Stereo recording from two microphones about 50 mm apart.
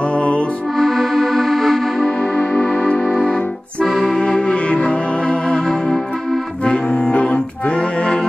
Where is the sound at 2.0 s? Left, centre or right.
Centre.